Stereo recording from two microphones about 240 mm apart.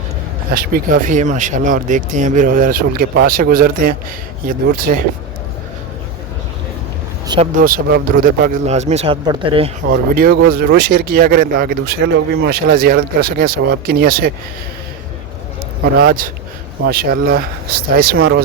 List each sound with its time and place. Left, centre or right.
0.5 s speech: right
7.5 s speech: right
9.9 s speech: right
16.0 s speech: right
18.2 s speech: right